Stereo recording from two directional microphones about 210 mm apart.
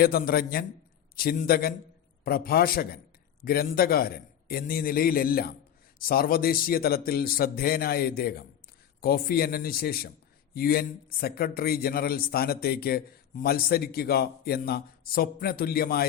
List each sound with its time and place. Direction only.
0.0 s a man's voice: 45° left (ahead or behind)